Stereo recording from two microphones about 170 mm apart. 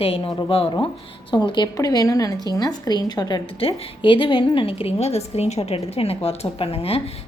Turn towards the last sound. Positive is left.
turn(degrees=35)  # may be behind; listen again after turning